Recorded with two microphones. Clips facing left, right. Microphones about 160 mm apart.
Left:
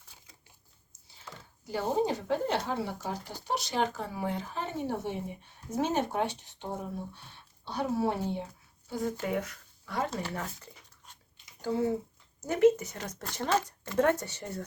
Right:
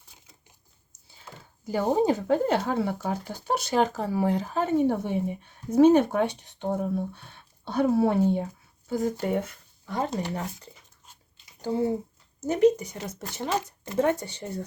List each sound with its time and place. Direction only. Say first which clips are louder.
1.7 s speech: right 6 dB; 50° right (ahead or behind)
8.9 s speech: right 5 dB; 45° right (ahead or behind); by 10.5 s 20° right (ahead or behind)
12.4 s speech: right 2 dB; 20° right (ahead or behind)